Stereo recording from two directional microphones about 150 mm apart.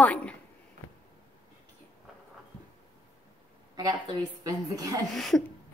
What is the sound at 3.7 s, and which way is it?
A woman's voice, 25° right (ahead or behind).